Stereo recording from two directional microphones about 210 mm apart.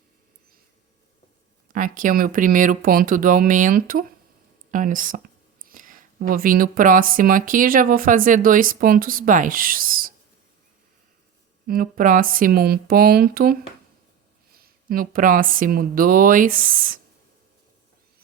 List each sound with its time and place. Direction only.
1.6 s speech: 40° right (ahead or behind)
11.6 s speech: 40° right (ahead or behind)